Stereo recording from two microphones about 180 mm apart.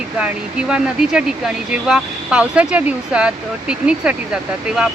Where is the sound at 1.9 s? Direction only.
5° right (ahead or behind).